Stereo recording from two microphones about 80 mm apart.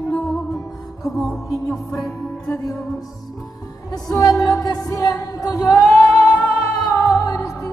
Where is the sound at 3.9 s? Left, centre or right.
Left.